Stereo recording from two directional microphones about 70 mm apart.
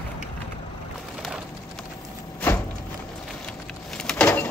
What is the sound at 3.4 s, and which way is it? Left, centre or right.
Vehicle, centre.